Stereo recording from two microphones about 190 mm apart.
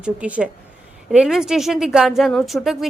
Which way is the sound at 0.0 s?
5° right (ahead or behind).